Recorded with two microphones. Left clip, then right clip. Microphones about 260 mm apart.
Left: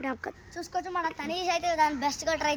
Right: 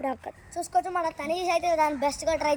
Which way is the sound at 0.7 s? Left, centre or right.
Left.